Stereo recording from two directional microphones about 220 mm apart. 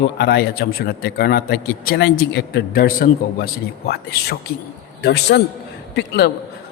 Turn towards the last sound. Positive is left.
turn(degrees=50)  # may be behind; listen again after turning